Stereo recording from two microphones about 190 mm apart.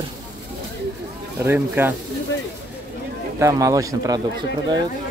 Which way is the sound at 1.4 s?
10° right (ahead or behind).